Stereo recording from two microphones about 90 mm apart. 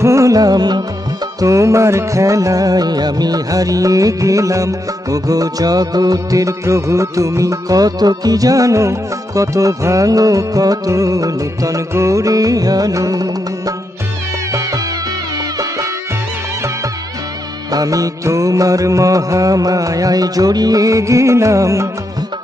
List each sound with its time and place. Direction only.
0.0 s music: 35° right (ahead or behind); by 0.8 s 50° right (ahead or behind)
1.4 s music: 35° right (ahead or behind)
17.6 s music: 40° right (ahead or behind)